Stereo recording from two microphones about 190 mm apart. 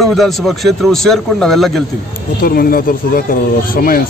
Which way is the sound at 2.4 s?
50° left (ahead or behind).